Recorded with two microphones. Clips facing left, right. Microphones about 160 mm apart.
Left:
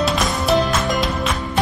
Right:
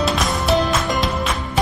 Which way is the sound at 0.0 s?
Centre (ahead or behind).